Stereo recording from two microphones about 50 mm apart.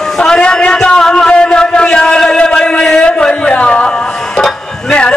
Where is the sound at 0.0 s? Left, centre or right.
Centre.